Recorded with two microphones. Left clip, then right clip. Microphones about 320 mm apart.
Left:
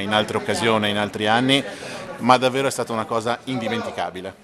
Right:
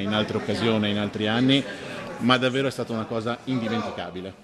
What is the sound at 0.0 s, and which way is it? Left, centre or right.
A man's voice, centre.